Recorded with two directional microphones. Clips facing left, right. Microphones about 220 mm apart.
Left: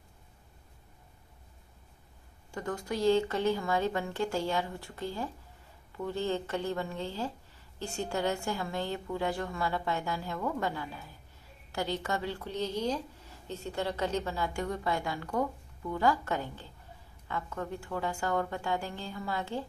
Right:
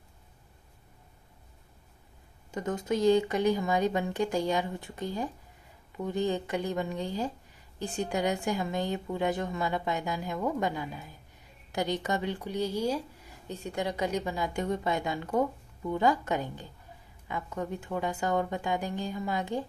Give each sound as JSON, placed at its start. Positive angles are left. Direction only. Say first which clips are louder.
{"t": 2.5, "sound": "speech", "louder": "right 4 dB", "side_deg": -20}